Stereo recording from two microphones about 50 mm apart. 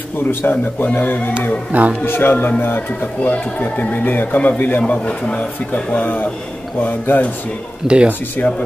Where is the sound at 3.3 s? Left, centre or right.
Left.